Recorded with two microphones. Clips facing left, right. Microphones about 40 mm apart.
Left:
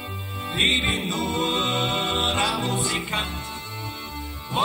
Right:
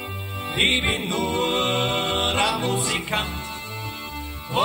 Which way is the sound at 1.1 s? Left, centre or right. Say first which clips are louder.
Right 2 dB; right.